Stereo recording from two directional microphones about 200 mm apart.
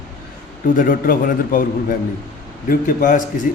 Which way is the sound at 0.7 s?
45° left (ahead or behind).